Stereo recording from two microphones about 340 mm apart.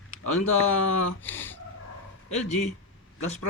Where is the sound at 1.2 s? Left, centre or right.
Centre.